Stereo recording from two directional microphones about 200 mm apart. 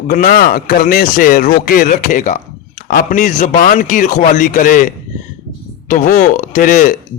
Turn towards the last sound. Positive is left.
turn(degrees=40)  # may be behind; listen again after turning